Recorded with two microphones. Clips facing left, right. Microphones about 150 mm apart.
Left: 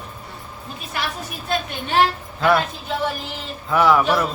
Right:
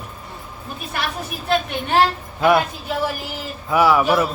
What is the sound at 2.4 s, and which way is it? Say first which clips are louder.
Speech: right 2 dB; 15° right (ahead or behind).